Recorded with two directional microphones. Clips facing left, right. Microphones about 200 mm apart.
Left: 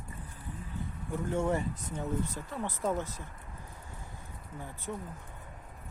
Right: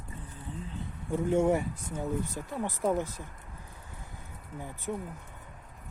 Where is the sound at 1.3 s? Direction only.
15° right (ahead or behind).